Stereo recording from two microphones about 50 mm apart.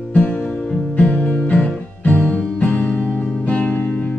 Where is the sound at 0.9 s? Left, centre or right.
Left.